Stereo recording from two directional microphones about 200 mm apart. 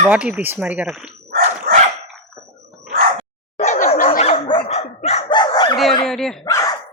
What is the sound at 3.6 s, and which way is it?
Dog, 35° left (ahead or behind).